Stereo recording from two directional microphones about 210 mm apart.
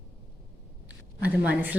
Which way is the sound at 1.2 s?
5° right (ahead or behind).